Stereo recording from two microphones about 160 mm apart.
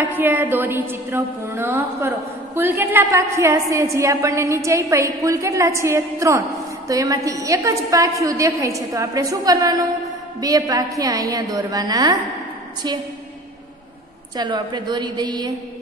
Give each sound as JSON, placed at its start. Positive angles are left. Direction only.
{"t": 0.0, "sound": "a woman's voice", "side_deg": -10}
{"t": 14.3, "sound": "a woman's voice", "side_deg": -30}